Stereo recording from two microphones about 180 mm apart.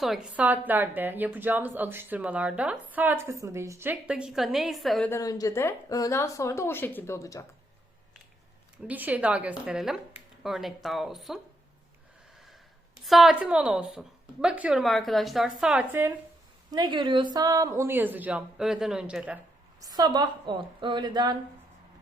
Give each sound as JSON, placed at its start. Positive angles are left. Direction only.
{"t": 0.0, "sound": "a woman's voice", "side_deg": -5}
{"t": 5.1, "sound": "speech", "side_deg": 20}
{"t": 8.9, "sound": "a woman's voice", "side_deg": -10}
{"t": 13.1, "sound": "a woman's voice", "side_deg": 0}
{"t": 16.7, "sound": "a woman's voice", "side_deg": -25}
{"t": 19.8, "sound": "a woman's voice", "side_deg": -20}